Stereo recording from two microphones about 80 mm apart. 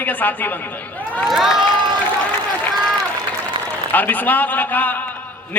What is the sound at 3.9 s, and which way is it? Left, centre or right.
A man's voice, left.